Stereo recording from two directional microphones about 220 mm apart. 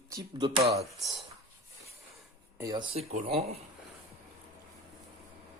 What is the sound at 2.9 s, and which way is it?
Speech, 30° right (ahead or behind).